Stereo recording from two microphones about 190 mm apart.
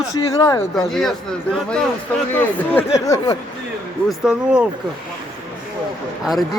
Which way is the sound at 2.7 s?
15° left (ahead or behind).